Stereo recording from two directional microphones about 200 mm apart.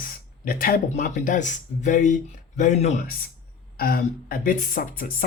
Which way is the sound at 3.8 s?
45° left (ahead or behind).